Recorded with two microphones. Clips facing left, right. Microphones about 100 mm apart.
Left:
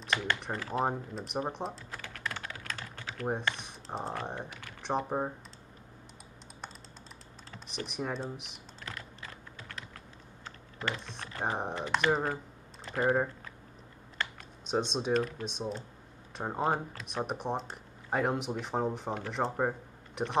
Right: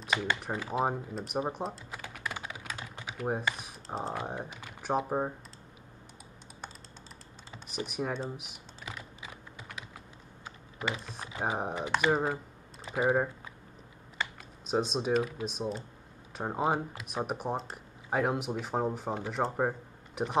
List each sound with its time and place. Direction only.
0.3 s speech: 5° right (ahead or behind)
1.9 s typing: 10° right (ahead or behind)
4.2 s speech: 5° right (ahead or behind)
4.5 s typing: 20° right (ahead or behind)
4.8 s speech: 5° right (ahead or behind)
7.5 s speech: 5° right (ahead or behind)
8.9 s typing: 15° right (ahead or behind)
10.4 s speech: 10° right (ahead or behind)
14.7 s speech: centre (ahead or behind)